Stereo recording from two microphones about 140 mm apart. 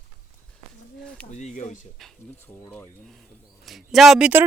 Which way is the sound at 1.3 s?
60° left (ahead or behind).